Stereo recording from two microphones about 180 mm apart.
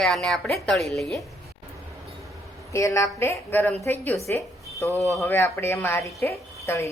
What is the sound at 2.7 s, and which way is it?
A woman's voice, 15° left (ahead or behind).